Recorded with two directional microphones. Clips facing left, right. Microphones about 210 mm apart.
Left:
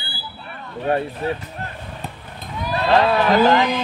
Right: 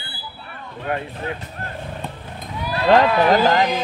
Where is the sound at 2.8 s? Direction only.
40° right (ahead or behind).